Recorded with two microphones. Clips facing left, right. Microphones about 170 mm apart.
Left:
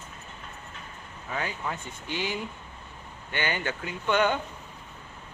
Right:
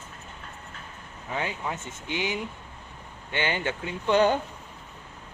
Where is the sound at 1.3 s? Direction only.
20° right (ahead or behind).